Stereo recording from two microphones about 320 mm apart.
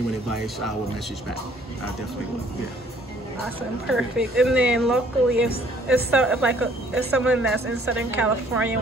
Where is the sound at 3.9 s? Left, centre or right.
Centre.